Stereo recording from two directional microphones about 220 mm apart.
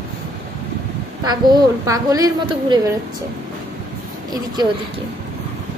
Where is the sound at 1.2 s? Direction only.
20° right (ahead or behind).